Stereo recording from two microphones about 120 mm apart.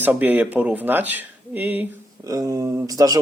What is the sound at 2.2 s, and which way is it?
Speech, 30° right (ahead or behind).